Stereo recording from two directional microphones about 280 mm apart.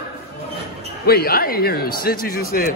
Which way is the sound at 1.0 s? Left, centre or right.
Left.